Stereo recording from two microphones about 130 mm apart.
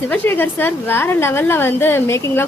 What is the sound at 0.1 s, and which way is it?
A woman's voice, 15° left (ahead or behind).